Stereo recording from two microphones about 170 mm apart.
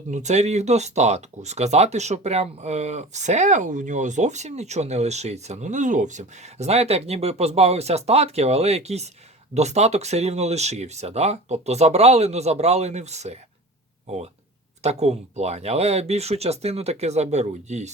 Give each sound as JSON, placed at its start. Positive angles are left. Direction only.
{"t": 0.1, "sound": "speech", "side_deg": -45}